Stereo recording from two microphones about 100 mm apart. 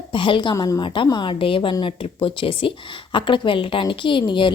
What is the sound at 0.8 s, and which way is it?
Speech, 55° left (ahead or behind).